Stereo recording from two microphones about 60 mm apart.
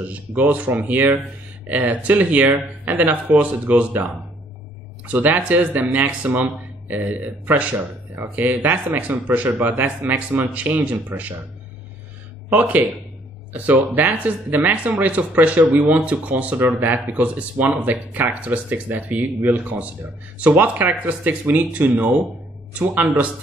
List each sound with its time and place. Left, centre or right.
0.0 s speech: right
5.0 s speech: right
12.4 s speech: right